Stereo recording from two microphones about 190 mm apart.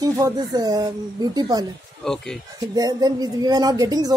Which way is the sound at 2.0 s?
5° left (ahead or behind).